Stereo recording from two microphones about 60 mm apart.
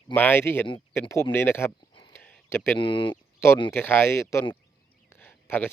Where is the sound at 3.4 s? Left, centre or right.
Left.